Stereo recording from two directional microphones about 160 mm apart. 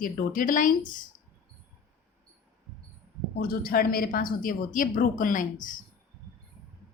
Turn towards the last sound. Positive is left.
turn(degrees=55)  # may be behind; listen again after turning